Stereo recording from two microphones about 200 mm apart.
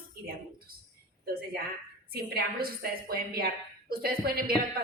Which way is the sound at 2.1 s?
50° right (ahead or behind).